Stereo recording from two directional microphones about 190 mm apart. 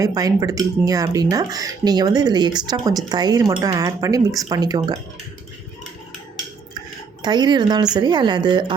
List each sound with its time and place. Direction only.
0.0 s speech: 20° right (ahead or behind)
7.2 s speech: 20° right (ahead or behind)